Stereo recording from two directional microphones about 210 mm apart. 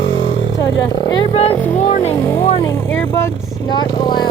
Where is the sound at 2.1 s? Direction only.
10° left (ahead or behind).